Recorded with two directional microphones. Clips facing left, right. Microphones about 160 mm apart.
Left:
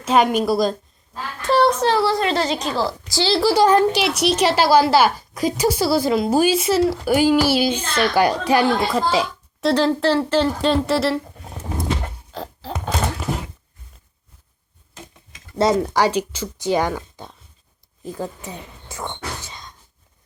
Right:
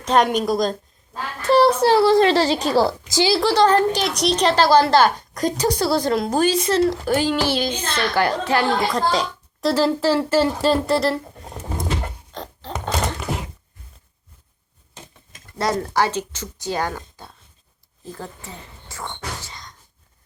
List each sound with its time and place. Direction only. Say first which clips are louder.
0.0 s speech: left 1 dB; 5° left (ahead or behind)
1.4 s a sound: right 2 dB; centre (ahead or behind)
2.1 s a woman's voice: right 5 dB; 35° right (ahead or behind)
3.1 s a woman's voice: right 2 dB; 15° right (ahead or behind)
3.3 s a woman's voice: left 2 dB; 10° left (ahead or behind)
12.3 s a sound: left 4 dB; 5° left (ahead or behind)
15.5 s a woman's voice: left 4 dB; 20° left (ahead or behind)